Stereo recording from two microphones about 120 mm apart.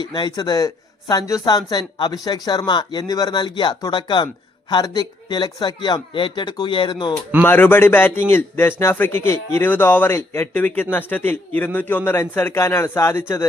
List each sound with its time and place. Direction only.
0.0 s speech: 35° left (ahead or behind)
7.4 s a man's voice: 15° left (ahead or behind)